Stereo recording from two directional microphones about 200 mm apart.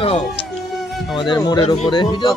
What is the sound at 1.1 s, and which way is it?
Speech, 20° left (ahead or behind).